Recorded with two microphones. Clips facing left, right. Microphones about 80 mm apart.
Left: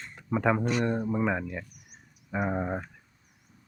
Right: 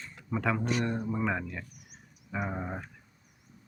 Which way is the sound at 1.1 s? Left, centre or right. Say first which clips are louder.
Left 3 dB; centre.